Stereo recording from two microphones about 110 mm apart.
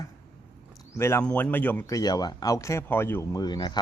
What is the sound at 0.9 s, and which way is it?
Speech, 25° left (ahead or behind).